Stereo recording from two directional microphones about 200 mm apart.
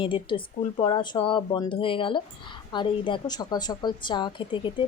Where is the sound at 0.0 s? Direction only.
25° left (ahead or behind).